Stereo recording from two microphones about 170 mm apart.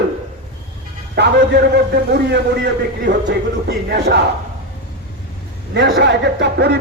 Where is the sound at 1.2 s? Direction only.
85° right.